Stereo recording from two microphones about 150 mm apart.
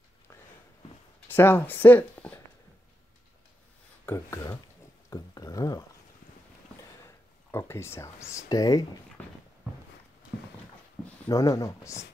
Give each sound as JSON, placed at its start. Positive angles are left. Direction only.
{"t": 1.3, "sound": "speech", "side_deg": 15}
{"t": 4.0, "sound": "speech", "side_deg": 20}
{"t": 5.1, "sound": "a sound", "side_deg": 25}
{"t": 7.1, "sound": "speech", "side_deg": 20}
{"t": 11.2, "sound": "speech", "side_deg": 20}